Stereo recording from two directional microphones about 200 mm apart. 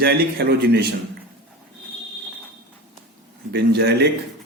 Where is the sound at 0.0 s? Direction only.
55° right (ahead or behind).